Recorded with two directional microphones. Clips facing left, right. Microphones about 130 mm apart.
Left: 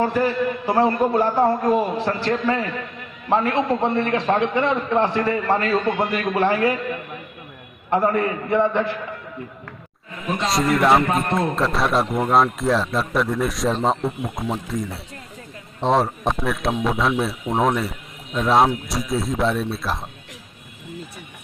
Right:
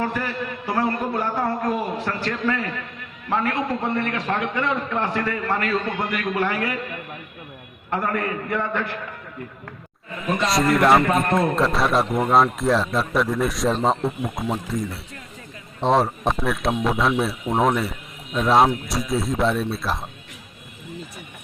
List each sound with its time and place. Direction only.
0.0 s a man's voice: 25° left (ahead or behind)
7.9 s a man's voice: 25° left (ahead or behind)
10.4 s a man's voice: centre (ahead or behind)